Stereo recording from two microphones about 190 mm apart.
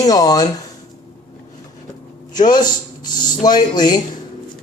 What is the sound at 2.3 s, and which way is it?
Speech, 20° left (ahead or behind).